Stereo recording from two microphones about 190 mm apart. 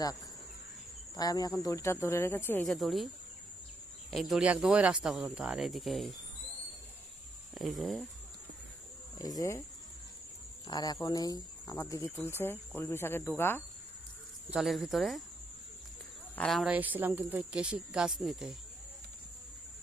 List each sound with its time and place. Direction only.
1.1 s speech: 20° left (ahead or behind); by 3.1 s centre (ahead or behind)
4.1 s speech: centre (ahead or behind)
7.5 s speech: centre (ahead or behind)
9.1 s speech: 20° left (ahead or behind)
10.7 s speech: 20° left (ahead or behind)
14.5 s speech: centre (ahead or behind)
16.3 s speech: 5° left (ahead or behind)